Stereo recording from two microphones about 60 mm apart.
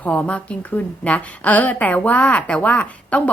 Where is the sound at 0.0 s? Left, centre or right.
Left.